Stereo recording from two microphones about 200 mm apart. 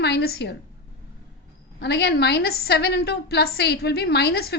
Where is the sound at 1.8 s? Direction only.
55° left (ahead or behind).